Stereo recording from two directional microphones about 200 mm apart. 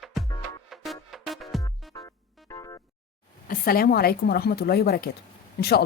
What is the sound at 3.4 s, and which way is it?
Speech, 45° left (ahead or behind).